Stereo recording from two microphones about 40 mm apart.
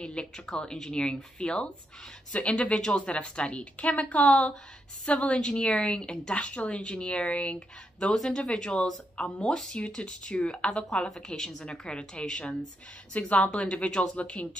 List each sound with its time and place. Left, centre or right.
0.0 s a woman's voice: left
3.8 s a woman's voice: left
8.0 s a woman's voice: centre
9.8 s a woman's voice: left